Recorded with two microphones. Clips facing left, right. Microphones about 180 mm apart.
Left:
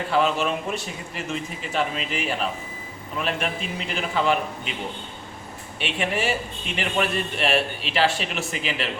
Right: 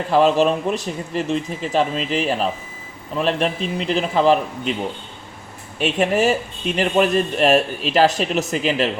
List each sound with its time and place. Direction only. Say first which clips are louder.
0.1 s a man's voice: right 8 dB; 35° right (ahead or behind)
5.8 s a man's voice: right 8 dB; 40° right (ahead or behind)